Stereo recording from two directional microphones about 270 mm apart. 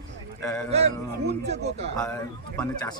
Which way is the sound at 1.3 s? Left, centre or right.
Right.